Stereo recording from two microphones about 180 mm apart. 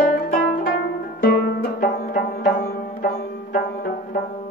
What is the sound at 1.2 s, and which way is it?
Music, 55° left (ahead or behind).